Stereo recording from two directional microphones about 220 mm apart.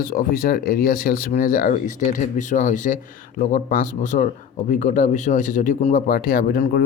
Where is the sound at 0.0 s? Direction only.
40° left (ahead or behind).